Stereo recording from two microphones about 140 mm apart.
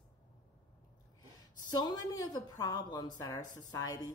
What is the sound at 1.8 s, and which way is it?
Speech, 30° left (ahead or behind).